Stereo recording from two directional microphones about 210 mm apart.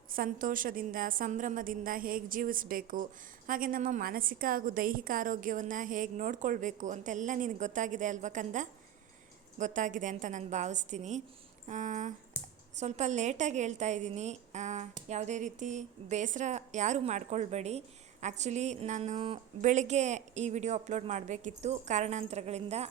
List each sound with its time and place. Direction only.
0.1 s a woman's voice: 40° right (ahead or behind)